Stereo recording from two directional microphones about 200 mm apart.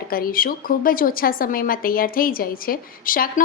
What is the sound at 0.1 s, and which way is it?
A woman's voice, 45° left (ahead or behind).